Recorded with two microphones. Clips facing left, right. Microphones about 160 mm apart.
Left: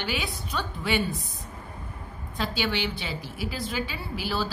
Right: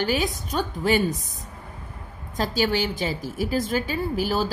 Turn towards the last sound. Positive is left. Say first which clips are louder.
# right 6 dB
turn(degrees=-45)  # may be behind; listen again after turning